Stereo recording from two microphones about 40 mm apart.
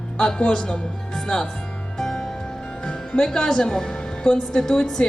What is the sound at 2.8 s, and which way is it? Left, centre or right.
A woman's voice, left.